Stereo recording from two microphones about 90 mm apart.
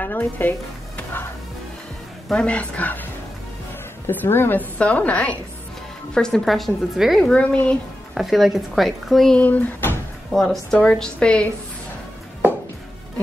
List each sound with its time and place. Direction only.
0.0 s speech: 25° left (ahead or behind)
2.2 s a woman's voice: 10° left (ahead or behind)
4.1 s a woman's voice: 25° left (ahead or behind); by 7.3 s centre (ahead or behind)
7.3 s a woman's voice: 15° left (ahead or behind)
8.1 s speech: centre (ahead or behind)
9.4 s speech: 20° left (ahead or behind)
10.3 s a woman's voice: 5° left (ahead or behind)